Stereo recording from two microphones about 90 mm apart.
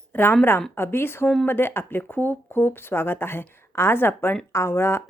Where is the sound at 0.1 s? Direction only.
25° left (ahead or behind).